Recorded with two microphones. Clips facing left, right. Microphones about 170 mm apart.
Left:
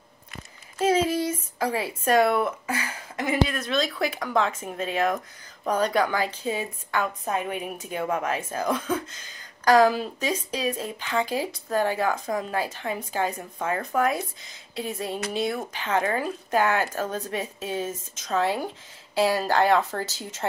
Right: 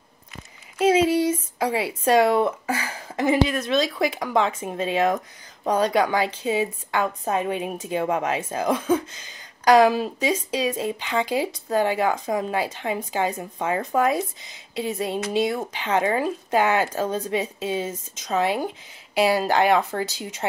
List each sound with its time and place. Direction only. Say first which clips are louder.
0.7 s speech: right 4 dB; 20° right (ahead or behind)
3.5 s speech: right 4 dB; 20° right (ahead or behind)